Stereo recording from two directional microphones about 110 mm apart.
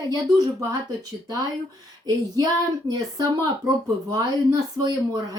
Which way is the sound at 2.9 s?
35° right (ahead or behind).